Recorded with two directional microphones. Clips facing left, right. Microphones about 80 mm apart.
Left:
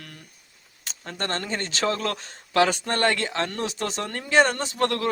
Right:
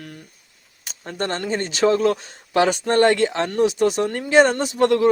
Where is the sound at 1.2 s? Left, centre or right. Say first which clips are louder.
Right 5 dB; centre.